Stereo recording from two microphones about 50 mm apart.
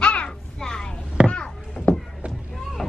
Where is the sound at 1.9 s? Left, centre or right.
Left.